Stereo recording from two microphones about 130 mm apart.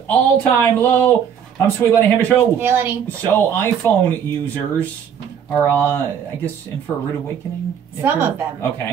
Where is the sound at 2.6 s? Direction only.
15° right (ahead or behind).